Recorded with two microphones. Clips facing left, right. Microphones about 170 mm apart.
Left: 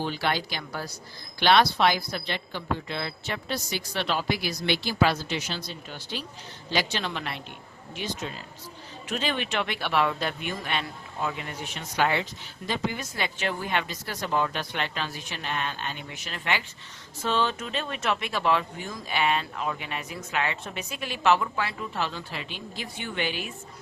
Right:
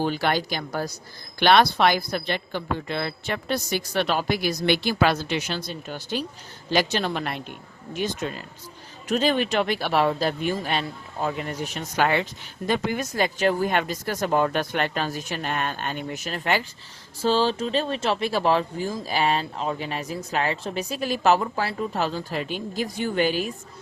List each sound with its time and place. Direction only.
0.0 s a woman's voice: 50° right (ahead or behind)
9.0 s a woman's voice: 40° right (ahead or behind)